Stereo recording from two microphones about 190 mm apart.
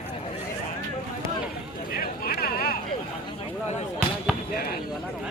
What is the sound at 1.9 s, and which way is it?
Hubbub, 50° left (ahead or behind).